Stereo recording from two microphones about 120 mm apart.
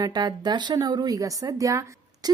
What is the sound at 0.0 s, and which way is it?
Speech, 35° right (ahead or behind).